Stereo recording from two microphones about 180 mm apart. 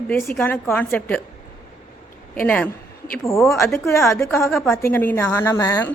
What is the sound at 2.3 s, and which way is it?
A woman's voice, 5° left (ahead or behind).